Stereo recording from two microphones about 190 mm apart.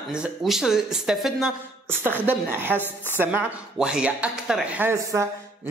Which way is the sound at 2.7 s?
10° left (ahead or behind).